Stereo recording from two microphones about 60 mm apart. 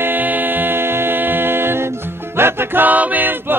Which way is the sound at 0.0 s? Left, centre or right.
Right.